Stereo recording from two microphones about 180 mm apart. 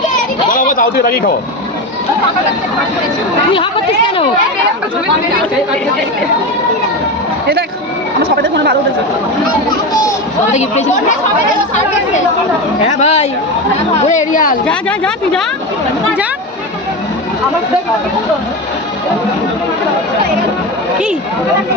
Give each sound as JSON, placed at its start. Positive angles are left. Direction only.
{"t": 0.5, "sound": "a man's voice", "side_deg": 50}
{"t": 3.5, "sound": "speech", "side_deg": 30}
{"t": 8.2, "sound": "speech", "side_deg": -65}
{"t": 10.5, "sound": "speech", "side_deg": 40}
{"t": 12.9, "sound": "a woman's voice", "side_deg": 40}
{"t": 14.7, "sound": "speech", "side_deg": 5}